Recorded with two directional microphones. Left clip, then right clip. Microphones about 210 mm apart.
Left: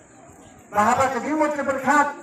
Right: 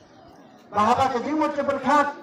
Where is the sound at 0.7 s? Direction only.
55° right (ahead or behind).